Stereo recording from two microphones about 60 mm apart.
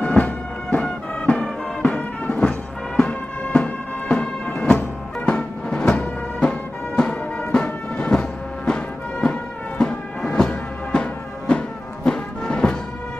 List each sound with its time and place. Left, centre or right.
0.0 s music: left